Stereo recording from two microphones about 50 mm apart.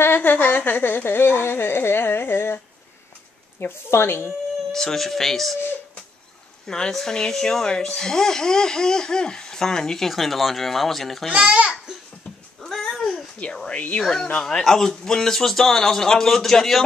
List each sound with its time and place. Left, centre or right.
0.0 s a sound: left
4.7 s speech: centre
6.7 s speech: centre
11.3 s a child's voice: right
12.6 s babbling: centre
13.7 s a sound: left
14.4 s speech: centre